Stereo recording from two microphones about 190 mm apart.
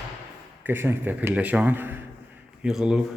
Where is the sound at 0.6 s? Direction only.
10° right (ahead or behind).